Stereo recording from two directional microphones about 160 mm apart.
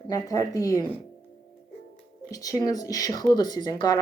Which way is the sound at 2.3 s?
20° left (ahead or behind).